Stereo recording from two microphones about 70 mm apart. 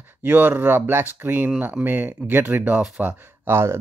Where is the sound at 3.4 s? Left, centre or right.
Right.